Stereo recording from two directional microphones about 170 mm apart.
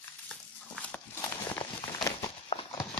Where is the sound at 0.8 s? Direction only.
10° left (ahead or behind).